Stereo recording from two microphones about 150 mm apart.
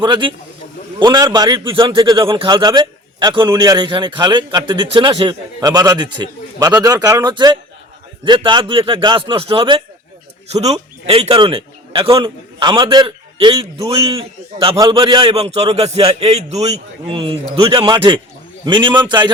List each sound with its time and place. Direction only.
0.0 s a man's voice: 30° right (ahead or behind)
10.5 s a man's voice: 45° right (ahead or behind)